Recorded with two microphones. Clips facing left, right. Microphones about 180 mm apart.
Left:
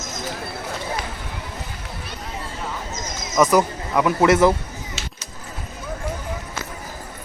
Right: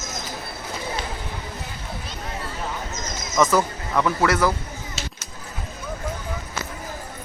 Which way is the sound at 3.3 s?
15° left (ahead or behind).